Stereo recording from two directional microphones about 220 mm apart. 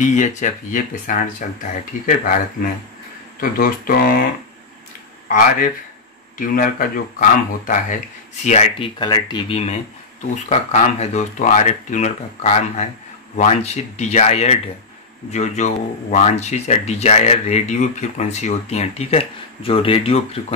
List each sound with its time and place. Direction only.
0.0 s speech: 35° left (ahead or behind)
6.3 s speech: 40° left (ahead or behind)